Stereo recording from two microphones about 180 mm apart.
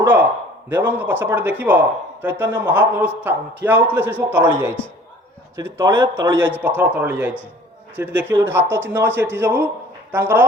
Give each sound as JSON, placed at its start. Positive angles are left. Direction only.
{"t": 0.0, "sound": "a man's voice", "side_deg": -10}
{"t": 5.5, "sound": "a man's voice", "side_deg": -15}